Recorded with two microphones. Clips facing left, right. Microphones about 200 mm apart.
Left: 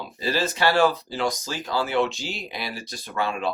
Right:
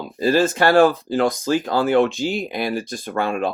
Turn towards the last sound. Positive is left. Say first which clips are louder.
# right 5 dB
turn(degrees=-50)  # may be behind; listen again after turning